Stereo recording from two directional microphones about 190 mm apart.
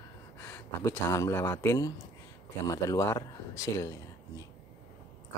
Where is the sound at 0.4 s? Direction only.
15° left (ahead or behind).